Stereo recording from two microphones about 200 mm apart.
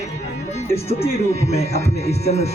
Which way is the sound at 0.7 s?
30° left (ahead or behind).